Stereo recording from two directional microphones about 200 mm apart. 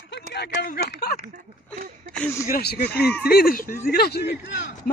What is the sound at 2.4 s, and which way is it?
A man's voice, 50° left (ahead or behind).